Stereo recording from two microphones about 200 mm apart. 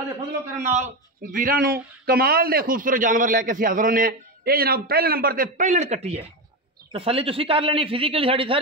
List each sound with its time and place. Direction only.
0.6 s a man's voice: 35° right (ahead or behind)